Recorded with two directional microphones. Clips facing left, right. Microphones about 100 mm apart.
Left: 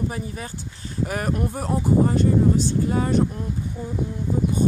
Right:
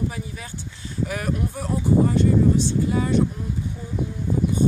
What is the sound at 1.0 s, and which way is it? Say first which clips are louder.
Speech: left 1 dB; 45° left (ahead or behind).